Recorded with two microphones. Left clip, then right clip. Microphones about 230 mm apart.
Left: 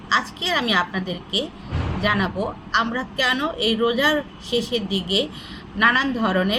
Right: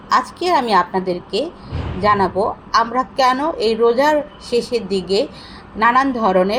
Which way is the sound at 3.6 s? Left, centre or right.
Centre.